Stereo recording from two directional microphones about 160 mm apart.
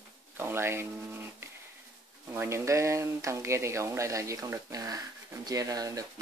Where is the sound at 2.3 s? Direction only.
15° right (ahead or behind).